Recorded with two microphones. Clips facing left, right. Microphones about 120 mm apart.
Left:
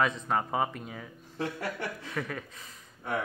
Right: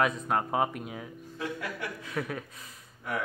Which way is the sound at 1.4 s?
35° left (ahead or behind).